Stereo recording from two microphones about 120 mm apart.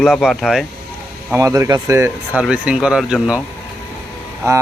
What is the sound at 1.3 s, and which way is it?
Speech, 25° right (ahead or behind).